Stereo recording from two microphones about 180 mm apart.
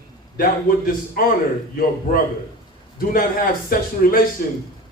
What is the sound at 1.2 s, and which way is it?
Speech, 50° left (ahead or behind).